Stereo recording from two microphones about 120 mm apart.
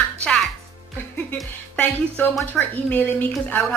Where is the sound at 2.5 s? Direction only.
15° left (ahead or behind).